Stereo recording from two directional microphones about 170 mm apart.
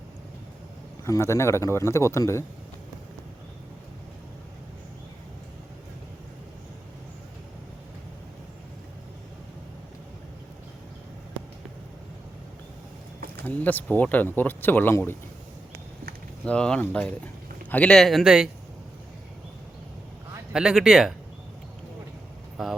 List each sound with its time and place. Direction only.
1.0 s speech: 15° left (ahead or behind)
13.4 s speech: 10° left (ahead or behind)
16.5 s speech: 5° left (ahead or behind)
20.5 s speech: 5° right (ahead or behind)